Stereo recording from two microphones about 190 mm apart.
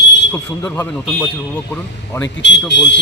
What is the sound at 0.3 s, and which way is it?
Speech, 15° left (ahead or behind).